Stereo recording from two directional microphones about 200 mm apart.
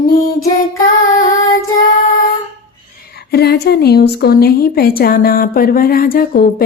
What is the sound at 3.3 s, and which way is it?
A woman's voice, 55° left (ahead or behind).